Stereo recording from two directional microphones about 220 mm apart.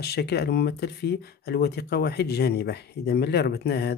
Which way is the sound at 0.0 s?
45° left (ahead or behind).